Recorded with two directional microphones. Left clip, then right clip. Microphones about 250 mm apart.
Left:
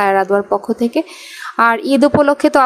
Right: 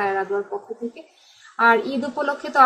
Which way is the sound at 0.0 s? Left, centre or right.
Left.